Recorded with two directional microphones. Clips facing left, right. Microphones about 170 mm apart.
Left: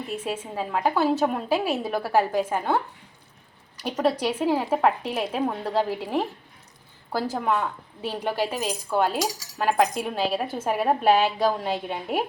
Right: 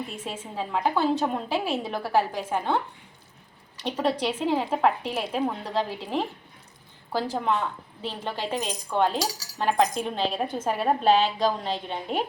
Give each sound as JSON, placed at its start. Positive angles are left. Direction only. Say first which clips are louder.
{"t": 0.3, "sound": "a woman's voice", "louder": "left 2 dB", "side_deg": 5}
{"t": 3.8, "sound": "a woman's voice", "louder": "left 2 dB", "side_deg": 5}